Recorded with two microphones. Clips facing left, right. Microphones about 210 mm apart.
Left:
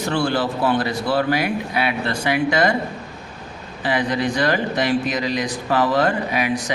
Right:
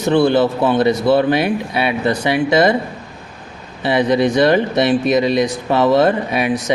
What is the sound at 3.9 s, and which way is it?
Speech, 20° right (ahead or behind).